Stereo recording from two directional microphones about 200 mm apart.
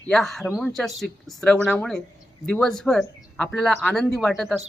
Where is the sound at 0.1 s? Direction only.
Centre (ahead or behind).